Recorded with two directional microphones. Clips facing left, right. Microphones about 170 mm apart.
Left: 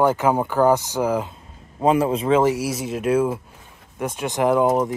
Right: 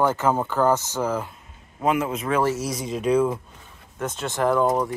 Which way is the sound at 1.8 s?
30° left (ahead or behind).